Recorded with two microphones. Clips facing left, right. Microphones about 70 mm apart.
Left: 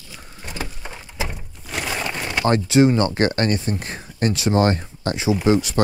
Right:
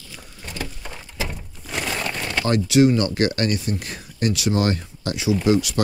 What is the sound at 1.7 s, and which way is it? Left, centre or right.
Crumpling, centre.